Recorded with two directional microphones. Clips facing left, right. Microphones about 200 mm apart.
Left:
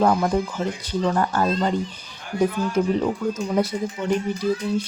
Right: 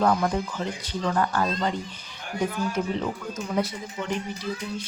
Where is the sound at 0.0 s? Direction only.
25° left (ahead or behind).